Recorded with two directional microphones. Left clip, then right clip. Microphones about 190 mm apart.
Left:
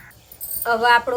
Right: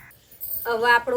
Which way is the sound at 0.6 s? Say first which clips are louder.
Left 3 dB; 15° right (ahead or behind).